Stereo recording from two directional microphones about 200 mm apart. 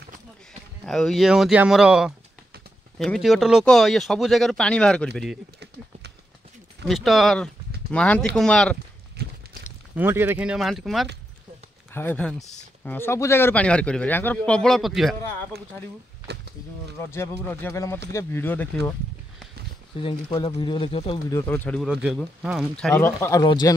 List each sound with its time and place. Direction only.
0.8 s speech: centre (ahead or behind)
6.9 s speech: centre (ahead or behind)
9.2 s a sound: 50° right (ahead or behind)
9.9 s speech: 10° right (ahead or behind)
17.1 s speech: 10° left (ahead or behind)
20.0 s speech: 25° left (ahead or behind)
21.3 s speech: 10° left (ahead or behind)
23.4 s speech: 20° left (ahead or behind)